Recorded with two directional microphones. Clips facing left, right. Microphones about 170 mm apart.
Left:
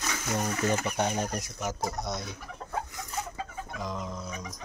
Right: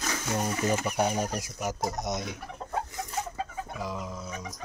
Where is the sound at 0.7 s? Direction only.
10° right (ahead or behind).